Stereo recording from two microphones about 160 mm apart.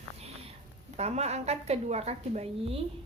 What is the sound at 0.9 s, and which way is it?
A woman's voice, 40° right (ahead or behind).